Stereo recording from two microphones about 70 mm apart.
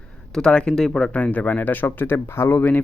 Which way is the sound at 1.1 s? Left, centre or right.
Left.